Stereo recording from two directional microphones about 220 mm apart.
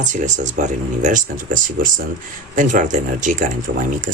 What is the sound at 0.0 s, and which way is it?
Speech, 35° right (ahead or behind).